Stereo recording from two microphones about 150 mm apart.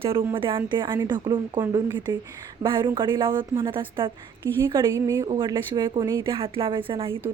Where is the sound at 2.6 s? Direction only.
30° right (ahead or behind).